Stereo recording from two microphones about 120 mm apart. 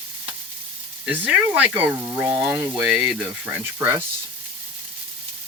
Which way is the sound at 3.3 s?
15° right (ahead or behind).